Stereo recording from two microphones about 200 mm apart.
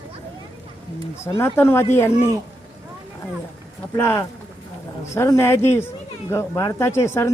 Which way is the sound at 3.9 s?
10° left (ahead or behind).